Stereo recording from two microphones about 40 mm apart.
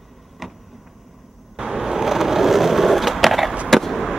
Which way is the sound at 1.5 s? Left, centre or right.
Centre.